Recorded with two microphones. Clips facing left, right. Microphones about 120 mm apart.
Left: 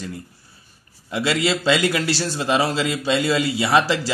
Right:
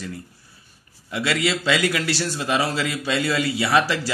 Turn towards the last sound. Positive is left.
turn(degrees=25)  # may be behind; listen again after turning